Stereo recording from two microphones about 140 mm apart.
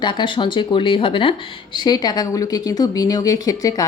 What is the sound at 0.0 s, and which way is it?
Speech, 35° left (ahead or behind).